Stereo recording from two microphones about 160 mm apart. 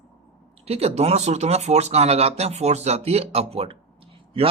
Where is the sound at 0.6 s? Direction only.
40° right (ahead or behind).